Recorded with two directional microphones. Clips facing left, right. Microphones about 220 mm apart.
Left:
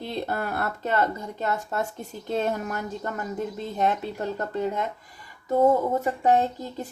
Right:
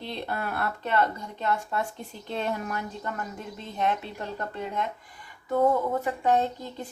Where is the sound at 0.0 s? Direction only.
45° left (ahead or behind).